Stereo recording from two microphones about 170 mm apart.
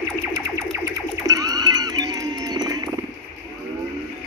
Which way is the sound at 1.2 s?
20° right (ahead or behind).